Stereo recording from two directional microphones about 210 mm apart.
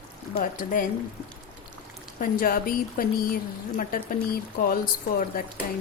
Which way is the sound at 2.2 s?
40° left (ahead or behind).